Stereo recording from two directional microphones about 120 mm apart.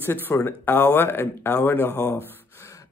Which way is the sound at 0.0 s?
20° left (ahead or behind).